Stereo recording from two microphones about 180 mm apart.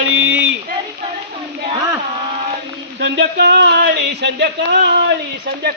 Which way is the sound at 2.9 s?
80° right.